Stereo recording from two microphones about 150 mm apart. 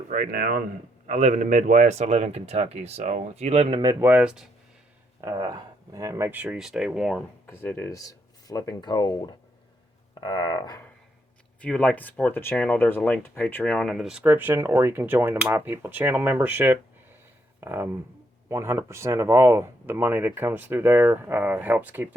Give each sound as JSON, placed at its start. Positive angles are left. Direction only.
{"t": 0.1, "sound": "speech", "side_deg": -70}
{"t": 1.0, "sound": "speech", "side_deg": -50}
{"t": 4.0, "sound": "speech", "side_deg": -10}
{"t": 5.2, "sound": "speech", "side_deg": -25}
{"t": 7.4, "sound": "speech", "side_deg": 15}
{"t": 11.6, "sound": "speech", "side_deg": 5}